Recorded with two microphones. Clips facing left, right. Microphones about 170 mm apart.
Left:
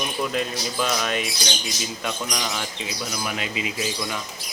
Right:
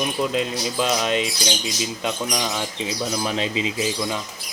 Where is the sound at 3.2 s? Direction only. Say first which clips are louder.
Right 3 dB; 25° right (ahead or behind).